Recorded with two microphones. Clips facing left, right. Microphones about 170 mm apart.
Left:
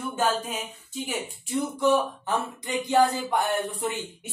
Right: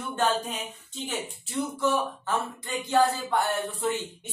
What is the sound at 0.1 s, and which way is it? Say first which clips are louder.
Speech: right 1 dB; 5° left (ahead or behind).